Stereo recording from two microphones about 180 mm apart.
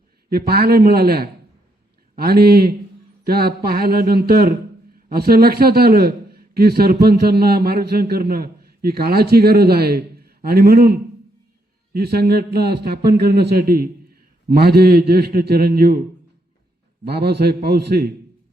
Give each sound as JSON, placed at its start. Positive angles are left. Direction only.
{"t": 0.3, "sound": "a man's voice", "side_deg": -60}
{"t": 11.9, "sound": "a man's voice", "side_deg": -60}
{"t": 17.1, "sound": "a man's voice", "side_deg": -65}